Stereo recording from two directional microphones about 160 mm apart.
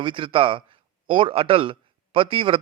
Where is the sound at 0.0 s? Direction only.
30° right (ahead or behind).